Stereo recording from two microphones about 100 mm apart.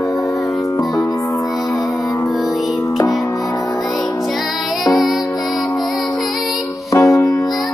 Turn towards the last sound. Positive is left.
turn(degrees=30)  # may be behind; listen again after turning